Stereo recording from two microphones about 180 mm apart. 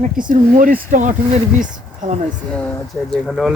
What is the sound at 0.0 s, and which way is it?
Speech, 45° right (ahead or behind).